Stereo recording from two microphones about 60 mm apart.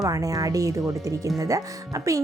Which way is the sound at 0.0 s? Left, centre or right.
Right.